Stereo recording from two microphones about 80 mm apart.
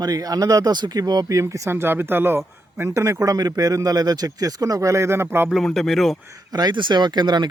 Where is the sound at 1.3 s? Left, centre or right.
Right.